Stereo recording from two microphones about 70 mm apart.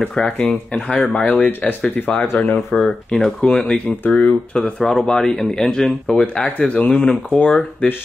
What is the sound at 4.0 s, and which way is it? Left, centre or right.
Speech, left.